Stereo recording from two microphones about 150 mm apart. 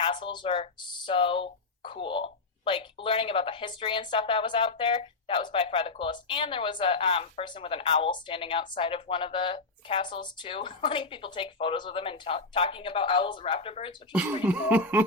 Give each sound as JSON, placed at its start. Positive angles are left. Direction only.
{"t": 0.0, "sound": "speech", "side_deg": 30}
{"t": 14.1, "sound": "cough", "side_deg": -10}